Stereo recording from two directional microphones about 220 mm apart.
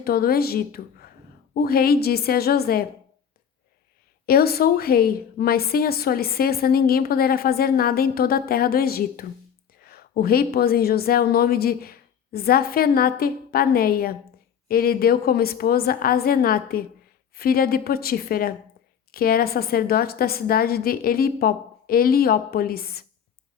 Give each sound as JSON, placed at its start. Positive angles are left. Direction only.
{"t": 0.0, "sound": "a woman's voice", "side_deg": 45}
{"t": 4.3, "sound": "a woman's voice", "side_deg": 45}